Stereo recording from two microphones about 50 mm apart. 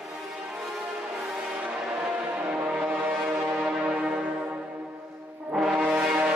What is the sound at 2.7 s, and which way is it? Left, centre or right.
Music, right.